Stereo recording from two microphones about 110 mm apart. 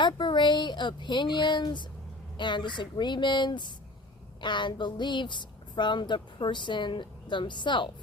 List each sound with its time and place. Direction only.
0.0 s a woman's voice: 45° left (ahead or behind)